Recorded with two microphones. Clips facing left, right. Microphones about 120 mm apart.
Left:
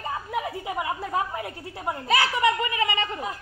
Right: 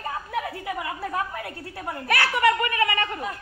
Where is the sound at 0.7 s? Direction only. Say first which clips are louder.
Left 1 dB; 20° left (ahead or behind).